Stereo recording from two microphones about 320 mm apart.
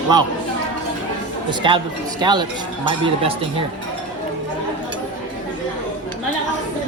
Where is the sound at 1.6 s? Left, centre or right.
Centre.